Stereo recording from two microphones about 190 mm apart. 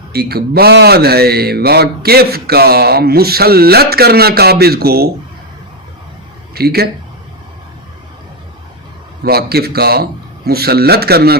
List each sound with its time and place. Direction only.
0.1 s a man's voice: 55° right (ahead or behind)
6.5 s speech: 55° right (ahead or behind)
9.2 s a man's voice: 55° right (ahead or behind)